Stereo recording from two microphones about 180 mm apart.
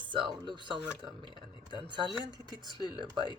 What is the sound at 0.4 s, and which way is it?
Speech, 25° right (ahead or behind).